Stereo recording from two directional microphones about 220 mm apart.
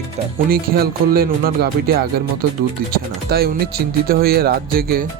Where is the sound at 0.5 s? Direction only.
45° right (ahead or behind).